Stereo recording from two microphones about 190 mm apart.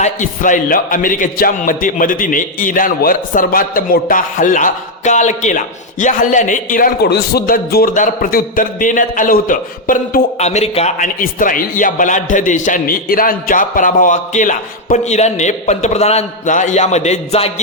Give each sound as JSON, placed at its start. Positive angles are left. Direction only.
{"t": 0.0, "sound": "speech", "side_deg": 40}